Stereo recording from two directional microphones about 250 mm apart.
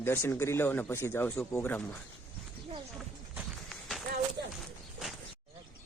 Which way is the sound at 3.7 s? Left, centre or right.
Centre.